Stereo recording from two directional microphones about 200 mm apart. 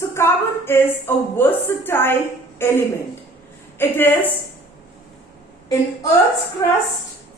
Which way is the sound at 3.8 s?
10° left (ahead or behind).